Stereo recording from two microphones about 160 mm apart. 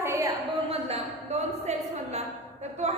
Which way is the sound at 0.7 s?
40° right (ahead or behind).